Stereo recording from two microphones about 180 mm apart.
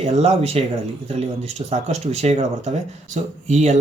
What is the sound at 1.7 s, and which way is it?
Speech, 35° right (ahead or behind).